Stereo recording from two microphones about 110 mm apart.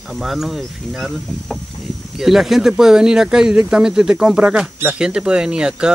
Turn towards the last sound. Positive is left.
turn(degrees=-5)  # may be behind; listen again after turning